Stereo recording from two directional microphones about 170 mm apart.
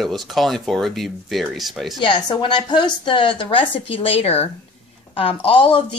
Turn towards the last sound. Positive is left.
turn(degrees=30)  # may be behind; listen again after turning